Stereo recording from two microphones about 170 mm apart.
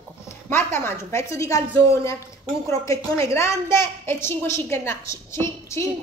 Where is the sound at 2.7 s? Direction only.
20° left (ahead or behind).